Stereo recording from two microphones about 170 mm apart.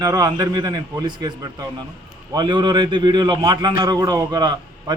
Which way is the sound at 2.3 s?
25° right (ahead or behind).